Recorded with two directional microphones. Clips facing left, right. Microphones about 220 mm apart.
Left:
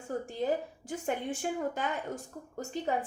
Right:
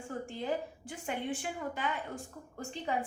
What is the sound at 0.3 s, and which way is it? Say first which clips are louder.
A woman's voice: left 4 dB; 40° left (ahead or behind).